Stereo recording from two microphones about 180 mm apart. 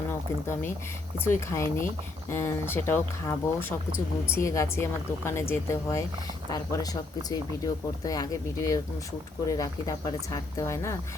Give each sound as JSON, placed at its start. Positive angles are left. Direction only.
{"t": 1.2, "sound": "a woman's voice", "side_deg": 15}
{"t": 7.3, "sound": "speech", "side_deg": 20}